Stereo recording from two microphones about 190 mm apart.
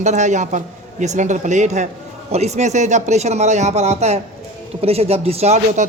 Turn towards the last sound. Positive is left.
turn(degrees=-35)  # may be behind; listen again after turning